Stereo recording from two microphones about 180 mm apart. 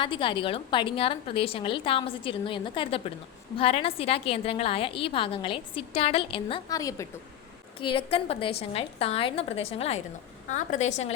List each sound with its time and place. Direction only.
0.0 s a woman's voice: 30° left (ahead or behind)
7.8 s a woman's voice: 30° left (ahead or behind)